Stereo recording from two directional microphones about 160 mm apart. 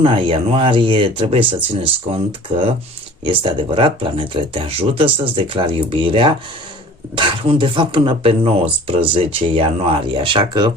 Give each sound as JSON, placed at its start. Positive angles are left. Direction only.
{"t": 0.0, "sound": "speech", "side_deg": -30}